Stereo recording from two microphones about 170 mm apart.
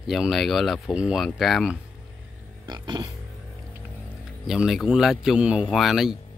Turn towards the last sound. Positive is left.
turn(degrees=0)  # may be behind; listen again after turning